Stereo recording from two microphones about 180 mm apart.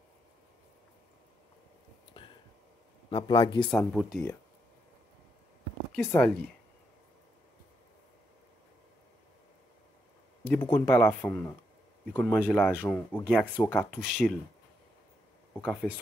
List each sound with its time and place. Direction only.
2.1 s a sound: 30° left (ahead or behind)
3.1 s speech: 30° left (ahead or behind)
3.7 s speech: centre (ahead or behind)
5.9 s speech: 5° left (ahead or behind)
10.5 s speech: 10° left (ahead or behind)
15.5 s speech: 5° left (ahead or behind)